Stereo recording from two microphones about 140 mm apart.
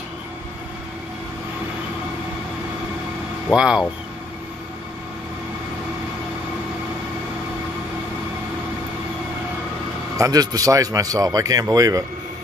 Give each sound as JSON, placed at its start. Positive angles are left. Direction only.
{"t": 3.5, "sound": "speech", "side_deg": -5}
{"t": 10.1, "sound": "a man's voice", "side_deg": -25}